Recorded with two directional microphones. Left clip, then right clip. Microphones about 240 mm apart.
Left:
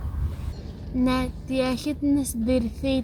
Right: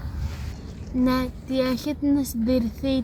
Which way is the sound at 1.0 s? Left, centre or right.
Centre.